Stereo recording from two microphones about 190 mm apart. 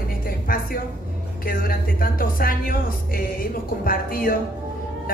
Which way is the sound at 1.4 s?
50° left (ahead or behind).